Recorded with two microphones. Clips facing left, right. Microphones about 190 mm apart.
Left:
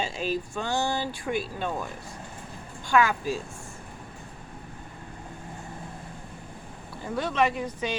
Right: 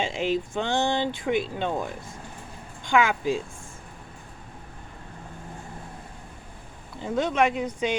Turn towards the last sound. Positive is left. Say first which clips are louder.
# right 3 dB
turn(degrees=-20)  # may be behind; listen again after turning